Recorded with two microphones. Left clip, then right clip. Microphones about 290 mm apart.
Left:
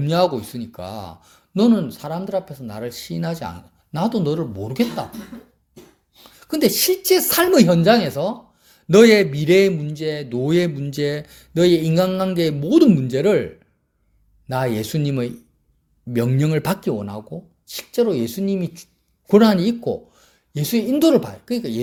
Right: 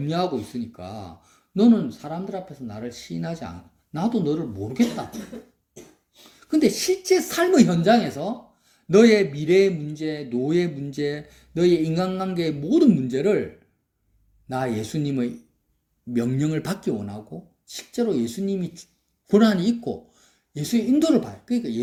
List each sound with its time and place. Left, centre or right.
0.0 s speech: left
6.4 s speech: left